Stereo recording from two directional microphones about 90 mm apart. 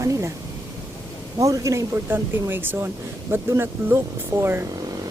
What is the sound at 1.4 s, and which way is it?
Speech, 35° right (ahead or behind).